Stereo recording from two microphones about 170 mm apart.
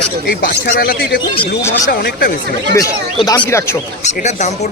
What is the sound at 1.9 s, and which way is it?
Speech, 65° left (ahead or behind).